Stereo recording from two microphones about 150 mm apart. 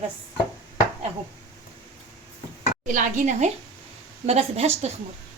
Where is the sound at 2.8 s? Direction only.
60° right (ahead or behind).